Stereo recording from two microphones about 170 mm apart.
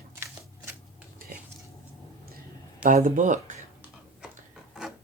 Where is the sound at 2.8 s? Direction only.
55° right (ahead or behind).